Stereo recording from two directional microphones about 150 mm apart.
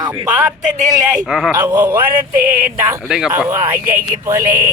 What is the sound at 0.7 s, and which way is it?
Speech, 60° right (ahead or behind).